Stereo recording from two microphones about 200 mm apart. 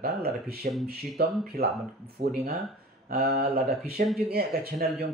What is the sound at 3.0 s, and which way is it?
Speech, 50° right (ahead or behind).